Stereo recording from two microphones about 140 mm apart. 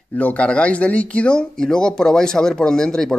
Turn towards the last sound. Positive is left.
turn(degrees=5)  # may be behind; listen again after turning